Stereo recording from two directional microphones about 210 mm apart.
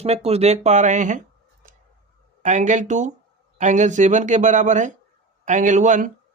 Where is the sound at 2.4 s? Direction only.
35° right (ahead or behind).